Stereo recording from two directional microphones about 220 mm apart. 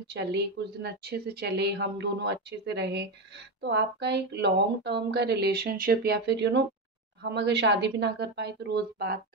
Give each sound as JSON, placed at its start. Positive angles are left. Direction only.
{"t": 0.0, "sound": "speech", "side_deg": -50}